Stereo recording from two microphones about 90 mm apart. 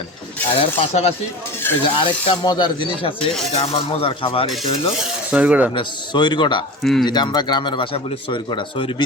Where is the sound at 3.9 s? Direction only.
90° left.